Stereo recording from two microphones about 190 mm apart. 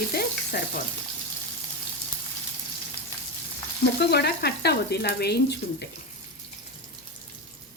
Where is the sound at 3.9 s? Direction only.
55° left (ahead or behind).